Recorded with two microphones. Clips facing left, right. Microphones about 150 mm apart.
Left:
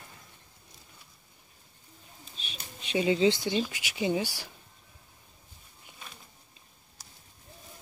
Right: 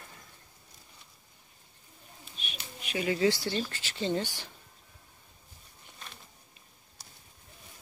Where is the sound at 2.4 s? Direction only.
30° left (ahead or behind); by 4.5 s 10° left (ahead or behind).